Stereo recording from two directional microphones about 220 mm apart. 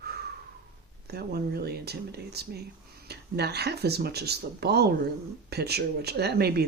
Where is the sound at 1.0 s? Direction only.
45° right (ahead or behind).